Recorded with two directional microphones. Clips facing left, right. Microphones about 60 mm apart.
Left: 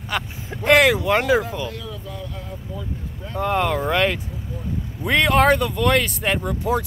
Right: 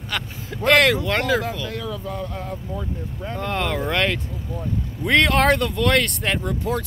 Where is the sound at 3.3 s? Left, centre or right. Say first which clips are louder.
Left 4 dB; centre.